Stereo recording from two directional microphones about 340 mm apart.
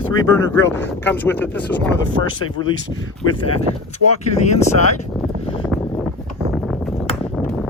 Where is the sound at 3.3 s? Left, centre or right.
Centre.